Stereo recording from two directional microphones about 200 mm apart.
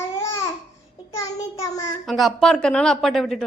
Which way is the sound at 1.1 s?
15° left (ahead or behind).